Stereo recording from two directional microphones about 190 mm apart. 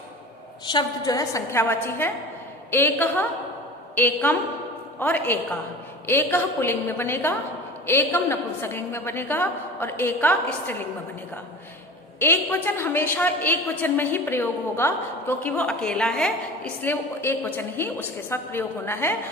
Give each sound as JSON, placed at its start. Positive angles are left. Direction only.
{"t": 0.6, "sound": "a woman's voice", "side_deg": 25}
{"t": 12.2, "sound": "a woman's voice", "side_deg": 10}